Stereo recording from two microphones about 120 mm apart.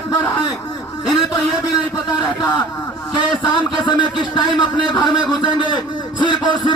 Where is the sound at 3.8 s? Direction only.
40° left (ahead or behind).